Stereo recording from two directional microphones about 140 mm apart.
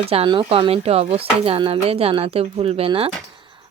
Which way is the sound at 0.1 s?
40° right (ahead or behind).